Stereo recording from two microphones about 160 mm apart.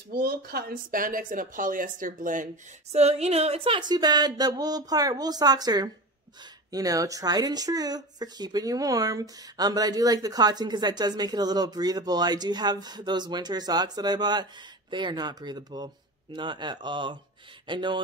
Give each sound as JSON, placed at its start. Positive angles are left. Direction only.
{"t": 0.1, "sound": "speech", "side_deg": -70}